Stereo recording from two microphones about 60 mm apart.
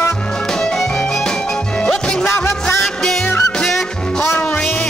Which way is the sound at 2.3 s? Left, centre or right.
Left.